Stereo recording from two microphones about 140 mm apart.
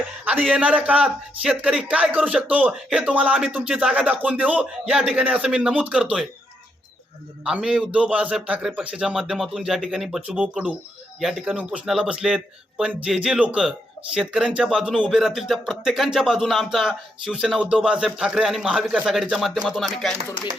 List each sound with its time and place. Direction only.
0.3 s a man's voice: 10° right (ahead or behind)
7.4 s speech: 5° right (ahead or behind)